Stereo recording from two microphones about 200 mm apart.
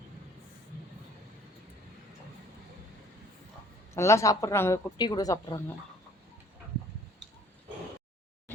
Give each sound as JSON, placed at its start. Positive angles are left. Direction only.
{"t": 3.9, "sound": "a woman's voice", "side_deg": 15}